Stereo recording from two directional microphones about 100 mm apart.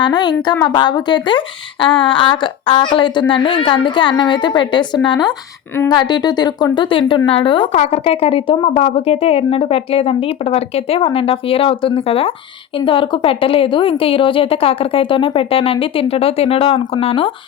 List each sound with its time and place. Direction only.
0.0 s a woman's voice: 45° left (ahead or behind); by 17.3 s 70° left (ahead or behind)